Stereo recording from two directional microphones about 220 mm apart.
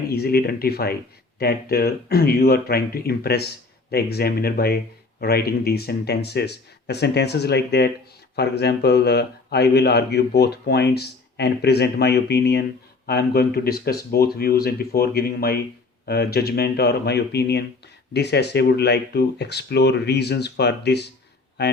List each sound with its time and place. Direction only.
0.1 s speech: 45° left (ahead or behind)